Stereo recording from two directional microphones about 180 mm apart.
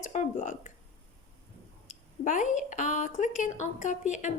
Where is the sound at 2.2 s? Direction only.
45° left (ahead or behind).